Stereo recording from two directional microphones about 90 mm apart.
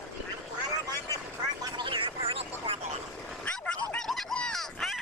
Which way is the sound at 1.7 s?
65° right (ahead or behind).